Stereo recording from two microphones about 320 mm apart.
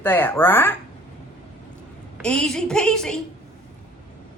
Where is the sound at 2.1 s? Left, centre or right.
Centre.